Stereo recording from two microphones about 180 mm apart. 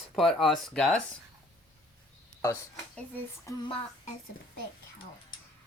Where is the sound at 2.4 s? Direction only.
15° left (ahead or behind).